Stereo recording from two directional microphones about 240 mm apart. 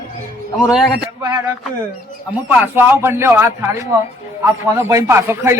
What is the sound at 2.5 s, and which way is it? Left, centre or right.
A man's voice, centre.